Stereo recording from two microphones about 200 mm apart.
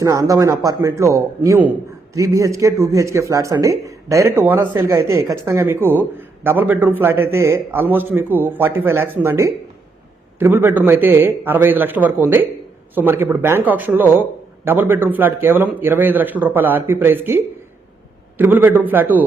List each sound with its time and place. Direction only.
0.0 s speech: 15° right (ahead or behind)